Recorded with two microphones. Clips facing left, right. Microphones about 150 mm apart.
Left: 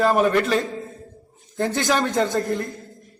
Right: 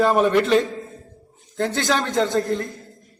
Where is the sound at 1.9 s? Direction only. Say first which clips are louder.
Even; centre (ahead or behind).